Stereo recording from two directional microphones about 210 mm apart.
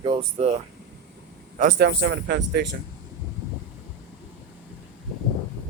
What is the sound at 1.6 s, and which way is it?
Speech, 45° right (ahead or behind).